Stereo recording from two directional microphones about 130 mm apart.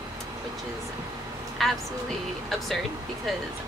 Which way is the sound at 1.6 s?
Centre (ahead or behind).